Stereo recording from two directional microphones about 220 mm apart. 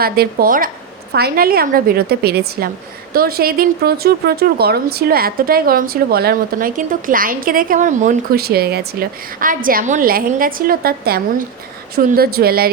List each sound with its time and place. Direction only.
0.0 s a woman's voice: 45° right (ahead or behind)